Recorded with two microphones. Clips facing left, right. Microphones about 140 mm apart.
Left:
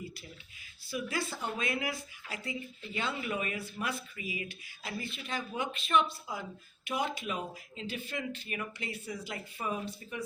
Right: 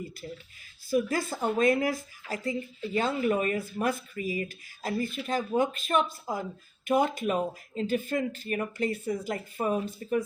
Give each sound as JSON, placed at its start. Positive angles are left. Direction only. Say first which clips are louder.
{"t": 0.9, "sound": "speech", "louder": "right 8 dB", "side_deg": -45}